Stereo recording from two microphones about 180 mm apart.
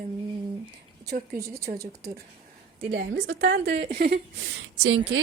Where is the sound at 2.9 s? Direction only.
70° right (ahead or behind).